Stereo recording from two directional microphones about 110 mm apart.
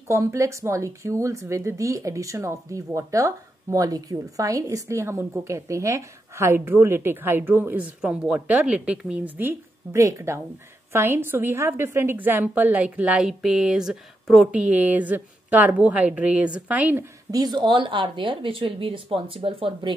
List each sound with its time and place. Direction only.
0.1 s a woman's voice: 30° right (ahead or behind)
17.3 s speech: 40° right (ahead or behind); by 19.9 s 55° right (ahead or behind)